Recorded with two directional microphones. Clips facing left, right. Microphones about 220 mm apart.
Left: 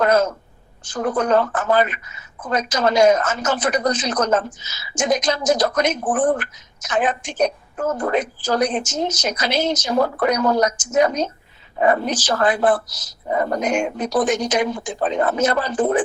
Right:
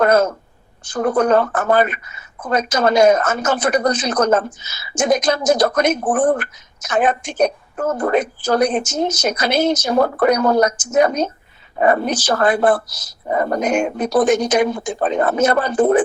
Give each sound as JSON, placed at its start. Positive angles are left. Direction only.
{"t": 0.0, "sound": "speech", "side_deg": -55}